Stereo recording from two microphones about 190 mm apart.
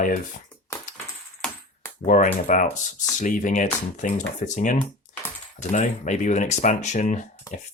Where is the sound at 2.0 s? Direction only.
40° left (ahead or behind).